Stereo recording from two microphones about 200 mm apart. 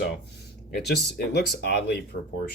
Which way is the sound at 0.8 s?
55° left (ahead or behind).